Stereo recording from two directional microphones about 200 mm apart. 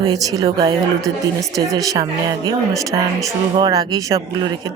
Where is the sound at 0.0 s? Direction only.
20° right (ahead or behind).